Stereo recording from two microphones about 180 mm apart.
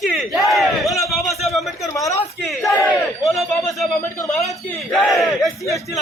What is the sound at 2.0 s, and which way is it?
Speech, 15° left (ahead or behind).